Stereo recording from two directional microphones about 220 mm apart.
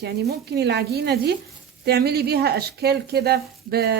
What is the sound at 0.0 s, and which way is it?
Speech, 50° right (ahead or behind).